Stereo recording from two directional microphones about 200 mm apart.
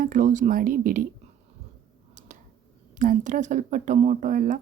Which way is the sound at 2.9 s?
40° right (ahead or behind).